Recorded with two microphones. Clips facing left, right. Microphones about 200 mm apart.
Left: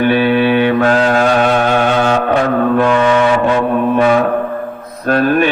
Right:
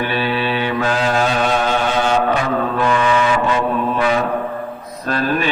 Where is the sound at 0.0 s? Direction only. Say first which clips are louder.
Left 8 dB; 55° left (ahead or behind).